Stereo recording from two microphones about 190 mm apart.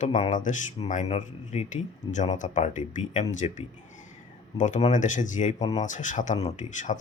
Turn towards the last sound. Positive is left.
turn(degrees=40)  # may be behind; listen again after turning